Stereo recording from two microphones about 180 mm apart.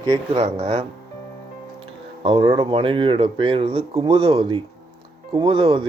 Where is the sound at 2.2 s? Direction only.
30° right (ahead or behind).